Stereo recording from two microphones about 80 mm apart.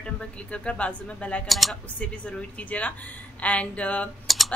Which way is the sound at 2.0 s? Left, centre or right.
Centre.